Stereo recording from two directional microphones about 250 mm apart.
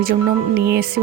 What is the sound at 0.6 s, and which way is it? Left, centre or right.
Speech, right.